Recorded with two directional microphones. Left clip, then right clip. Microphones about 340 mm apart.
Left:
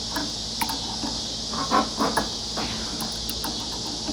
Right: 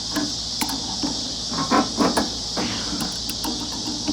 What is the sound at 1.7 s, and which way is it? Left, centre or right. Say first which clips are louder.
Cricket: right 3 dB; right.